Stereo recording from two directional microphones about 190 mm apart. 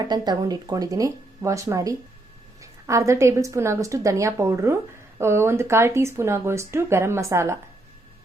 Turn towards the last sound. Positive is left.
turn(degrees=-15)  # may be behind; listen again after turning